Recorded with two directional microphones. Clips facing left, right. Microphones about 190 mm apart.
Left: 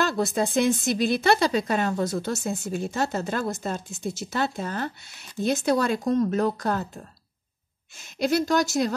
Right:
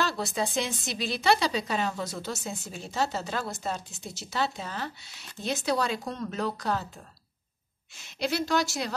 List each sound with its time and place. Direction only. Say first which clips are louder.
0.0 s speech: left 5 dB; 50° left (ahead or behind)
8.0 s speech: left 6 dB; 45° left (ahead or behind)